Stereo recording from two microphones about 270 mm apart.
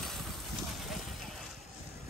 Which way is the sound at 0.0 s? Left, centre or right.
Centre.